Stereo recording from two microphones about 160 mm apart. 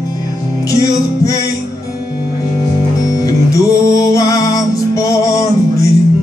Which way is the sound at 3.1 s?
20° left (ahead or behind).